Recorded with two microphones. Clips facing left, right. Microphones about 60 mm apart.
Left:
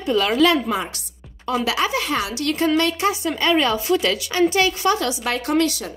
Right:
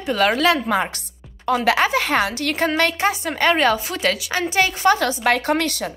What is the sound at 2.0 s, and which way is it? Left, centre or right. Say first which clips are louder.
A woman's voice: right 2 dB; right.